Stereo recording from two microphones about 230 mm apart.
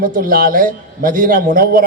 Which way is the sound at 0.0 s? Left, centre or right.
Right.